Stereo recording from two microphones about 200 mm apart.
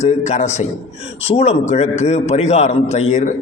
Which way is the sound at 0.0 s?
35° left (ahead or behind).